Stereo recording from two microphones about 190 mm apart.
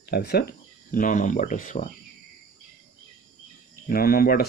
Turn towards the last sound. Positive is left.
turn(degrees=50)  # may be behind; listen again after turning